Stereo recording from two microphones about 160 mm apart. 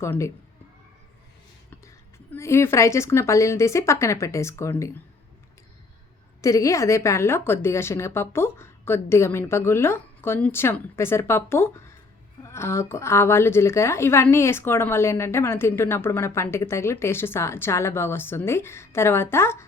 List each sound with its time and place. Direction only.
0.0 s a woman's voice: 15° left (ahead or behind)
2.3 s a woman's voice: 15° left (ahead or behind)
6.4 s a woman's voice: 20° left (ahead or behind)